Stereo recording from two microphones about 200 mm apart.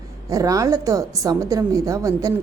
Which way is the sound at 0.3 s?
15° right (ahead or behind).